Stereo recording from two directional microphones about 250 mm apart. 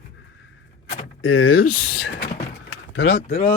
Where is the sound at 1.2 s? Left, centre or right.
Left.